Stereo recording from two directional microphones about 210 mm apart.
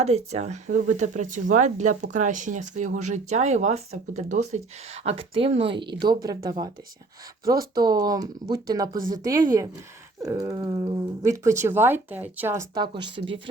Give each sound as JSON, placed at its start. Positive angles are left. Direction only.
{"t": 0.0, "sound": "speech", "side_deg": -30}
{"t": 7.8, "sound": "speech", "side_deg": -20}